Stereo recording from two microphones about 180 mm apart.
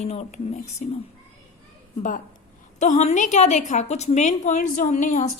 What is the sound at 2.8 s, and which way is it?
A woman's voice, 40° left (ahead or behind).